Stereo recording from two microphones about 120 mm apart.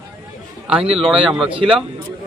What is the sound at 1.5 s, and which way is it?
Speech, 50° right (ahead or behind).